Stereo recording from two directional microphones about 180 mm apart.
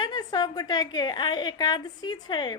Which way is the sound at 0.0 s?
25° left (ahead or behind).